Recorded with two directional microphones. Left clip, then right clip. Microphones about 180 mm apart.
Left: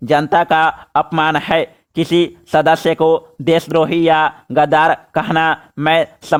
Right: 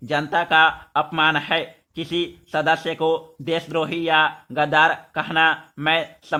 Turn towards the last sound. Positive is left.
turn(degrees=50)  # may be behind; listen again after turning